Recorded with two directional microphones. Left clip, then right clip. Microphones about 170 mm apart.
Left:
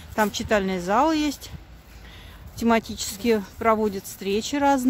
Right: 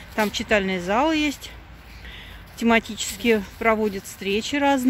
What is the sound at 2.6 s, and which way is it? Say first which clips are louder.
Speech: right 2 dB; 10° left (ahead or behind).